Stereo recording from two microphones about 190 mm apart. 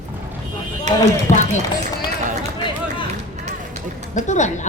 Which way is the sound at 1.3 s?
15° left (ahead or behind).